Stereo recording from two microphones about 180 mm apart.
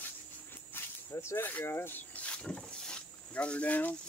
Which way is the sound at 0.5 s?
10° left (ahead or behind).